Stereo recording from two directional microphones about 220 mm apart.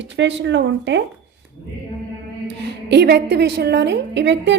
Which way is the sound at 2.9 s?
50° right (ahead or behind).